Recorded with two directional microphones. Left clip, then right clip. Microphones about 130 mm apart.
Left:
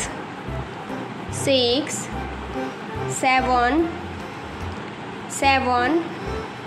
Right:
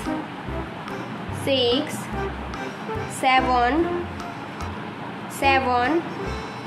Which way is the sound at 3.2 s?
15° left (ahead or behind).